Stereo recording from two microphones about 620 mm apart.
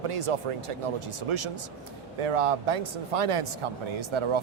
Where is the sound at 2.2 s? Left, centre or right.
Right.